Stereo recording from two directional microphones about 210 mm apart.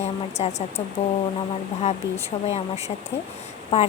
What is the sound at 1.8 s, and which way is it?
A woman's voice, 30° left (ahead or behind).